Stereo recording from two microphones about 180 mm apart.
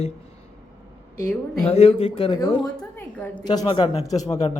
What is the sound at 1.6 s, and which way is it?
Speech, 35° left (ahead or behind).